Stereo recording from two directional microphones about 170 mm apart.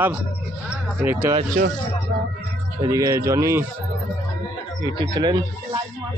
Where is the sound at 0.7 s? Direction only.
10° right (ahead or behind).